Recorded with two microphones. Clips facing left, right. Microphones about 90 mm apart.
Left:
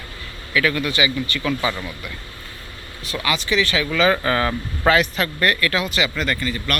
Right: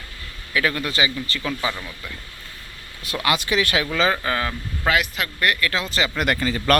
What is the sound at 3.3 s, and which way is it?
Speech, 50° right (ahead or behind).